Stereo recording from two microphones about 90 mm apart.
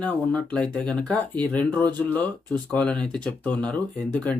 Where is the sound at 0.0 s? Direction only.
20° left (ahead or behind).